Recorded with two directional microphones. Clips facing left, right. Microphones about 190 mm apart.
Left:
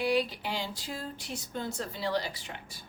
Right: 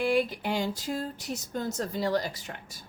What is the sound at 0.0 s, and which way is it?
A woman's voice, 50° right (ahead or behind).